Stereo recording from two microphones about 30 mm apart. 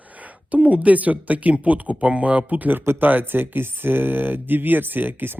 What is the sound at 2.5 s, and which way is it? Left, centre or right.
Speech, right.